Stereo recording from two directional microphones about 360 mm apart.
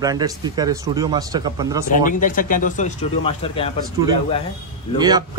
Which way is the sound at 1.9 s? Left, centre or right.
Left.